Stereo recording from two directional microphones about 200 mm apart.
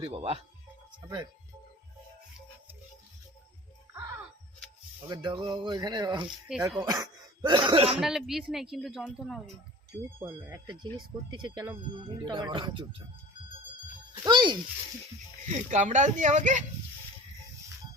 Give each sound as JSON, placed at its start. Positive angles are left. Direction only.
{"t": 0.0, "sound": "speech", "side_deg": -30}
{"t": 1.0, "sound": "speech", "side_deg": -15}
{"t": 5.0, "sound": "speech", "side_deg": -20}
{"t": 6.5, "sound": "speech", "side_deg": -5}
{"t": 6.8, "sound": "speech", "side_deg": -20}
{"t": 7.9, "sound": "speech", "side_deg": 0}
{"t": 11.3, "sound": "speech", "side_deg": -25}
{"t": 14.3, "sound": "a child's voice", "side_deg": -20}
{"t": 15.5, "sound": "speech", "side_deg": -35}